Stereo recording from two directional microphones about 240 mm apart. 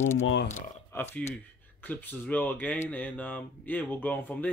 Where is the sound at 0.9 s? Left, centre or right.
Centre.